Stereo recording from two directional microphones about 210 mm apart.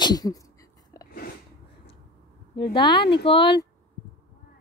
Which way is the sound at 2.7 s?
20° left (ahead or behind).